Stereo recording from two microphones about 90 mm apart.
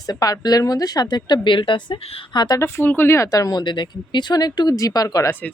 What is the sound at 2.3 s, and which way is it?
Speech, 50° left (ahead or behind).